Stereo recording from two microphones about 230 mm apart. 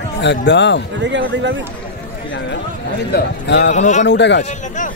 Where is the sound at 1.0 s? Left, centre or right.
Right.